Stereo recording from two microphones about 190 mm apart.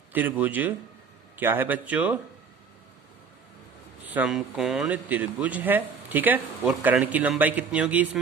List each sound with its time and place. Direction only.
0.1 s speech: 10° right (ahead or behind)
4.0 s speech: 10° right (ahead or behind)